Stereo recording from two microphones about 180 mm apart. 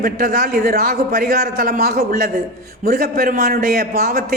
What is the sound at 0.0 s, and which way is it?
A man's voice, 55° right (ahead or behind).